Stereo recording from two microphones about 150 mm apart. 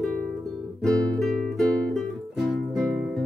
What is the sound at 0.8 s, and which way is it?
Music, 5° left (ahead or behind).